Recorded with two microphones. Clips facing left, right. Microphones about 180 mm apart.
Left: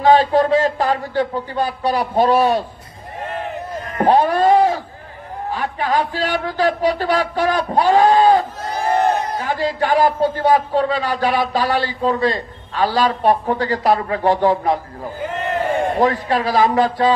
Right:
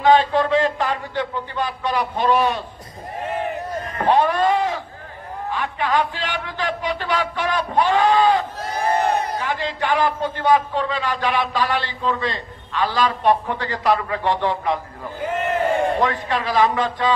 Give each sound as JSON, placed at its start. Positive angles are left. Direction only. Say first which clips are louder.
{"t": 0.0, "sound": "a man's voice", "louder": "left 3 dB", "side_deg": 40}
{"t": 4.0, "sound": "a sound", "louder": "left 4 dB", "side_deg": 40}
{"t": 5.5, "sound": "a man's voice", "louder": "left 2 dB", "side_deg": 40}
{"t": 8.7, "sound": "a sound", "louder": "left 3 dB", "side_deg": 0}
{"t": 9.4, "sound": "a man's voice", "louder": "left 4 dB", "side_deg": 40}
{"t": 16.0, "sound": "a man's voice", "louder": "left 5 dB", "side_deg": 40}